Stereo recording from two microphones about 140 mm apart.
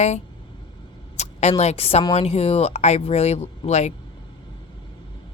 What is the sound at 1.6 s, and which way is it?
Speech, 50° left (ahead or behind).